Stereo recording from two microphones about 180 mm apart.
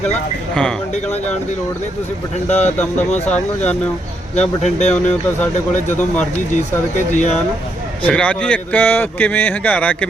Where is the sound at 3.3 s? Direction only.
10° left (ahead or behind).